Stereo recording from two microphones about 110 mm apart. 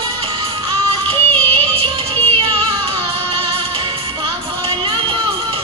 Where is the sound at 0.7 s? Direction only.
60° right (ahead or behind).